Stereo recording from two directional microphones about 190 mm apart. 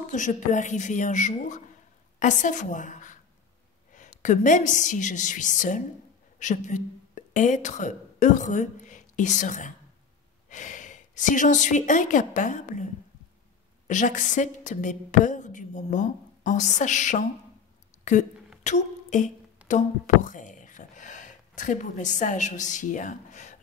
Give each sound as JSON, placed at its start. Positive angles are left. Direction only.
{"t": 0.1, "sound": "a woman's voice", "side_deg": 40}
{"t": 18.6, "sound": "beatboxing", "side_deg": 40}
{"t": 19.7, "sound": "speech", "side_deg": 40}